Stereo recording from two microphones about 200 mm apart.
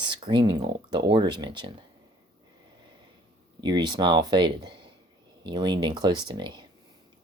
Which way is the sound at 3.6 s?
20° right (ahead or behind).